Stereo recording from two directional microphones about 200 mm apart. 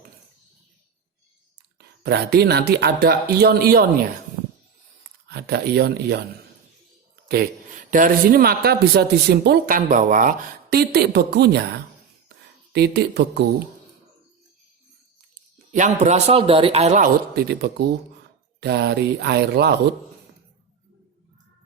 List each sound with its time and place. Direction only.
2.0 s speech: 50° right (ahead or behind)
5.3 s speech: 55° right (ahead or behind)
7.3 s speech: 45° right (ahead or behind)
12.7 s speech: 55° right (ahead or behind)
15.7 s a man's voice: 35° right (ahead or behind)
17.3 s speech: 55° right (ahead or behind)